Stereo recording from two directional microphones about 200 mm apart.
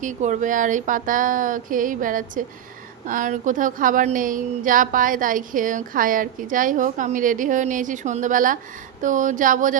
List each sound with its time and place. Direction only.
0.0 s a woman's voice: 40° right (ahead or behind)